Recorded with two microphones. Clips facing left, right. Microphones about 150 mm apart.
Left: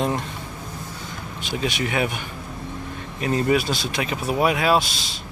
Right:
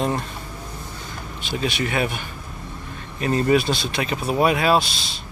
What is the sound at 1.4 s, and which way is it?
Speech, 15° left (ahead or behind).